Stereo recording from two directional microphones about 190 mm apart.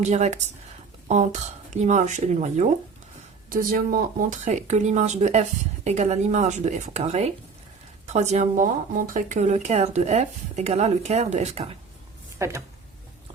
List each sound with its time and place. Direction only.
0.0 s speech: 35° right (ahead or behind)
12.4 s speech: 15° right (ahead or behind)